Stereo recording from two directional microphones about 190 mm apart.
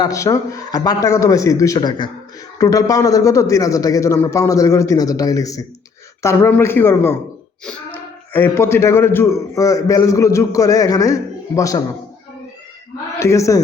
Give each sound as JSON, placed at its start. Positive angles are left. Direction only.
{"t": 0.0, "sound": "speech", "side_deg": 15}
{"t": 13.1, "sound": "a man's voice", "side_deg": 15}